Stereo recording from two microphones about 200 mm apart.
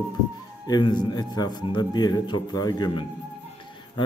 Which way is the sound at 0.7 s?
20° left (ahead or behind).